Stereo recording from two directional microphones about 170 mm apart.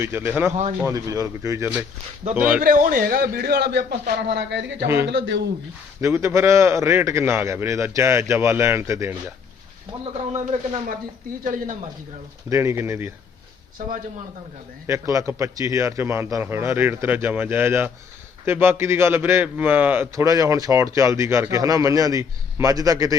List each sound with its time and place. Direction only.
0.0 s a man's voice: 15° right (ahead or behind)
2.6 s a man's voice: 55° right (ahead or behind); by 5.5 s 90° right
6.0 s a man's voice: 15° right (ahead or behind)
10.0 s speech: 40° right (ahead or behind)
12.5 s a man's voice: 15° right (ahead or behind)
14.8 s a man's voice: 15° right (ahead or behind)